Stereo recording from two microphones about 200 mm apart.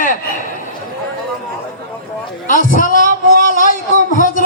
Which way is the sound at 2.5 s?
40° left (ahead or behind).